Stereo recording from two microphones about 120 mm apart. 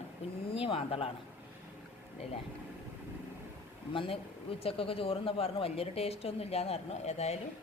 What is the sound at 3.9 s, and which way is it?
Speech, 45° left (ahead or behind).